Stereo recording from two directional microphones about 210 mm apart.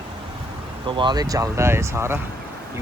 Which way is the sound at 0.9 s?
20° right (ahead or behind).